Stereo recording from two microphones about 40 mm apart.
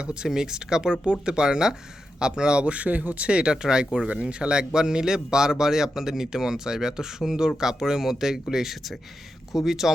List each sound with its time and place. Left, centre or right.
0.0 s speech: right
3.2 s a man's voice: right; by 9.9 s centre